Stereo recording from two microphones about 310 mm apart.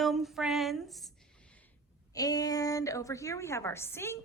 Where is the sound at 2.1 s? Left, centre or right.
Centre.